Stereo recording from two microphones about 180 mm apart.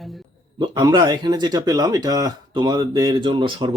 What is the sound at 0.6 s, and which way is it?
Speech, 25° right (ahead or behind).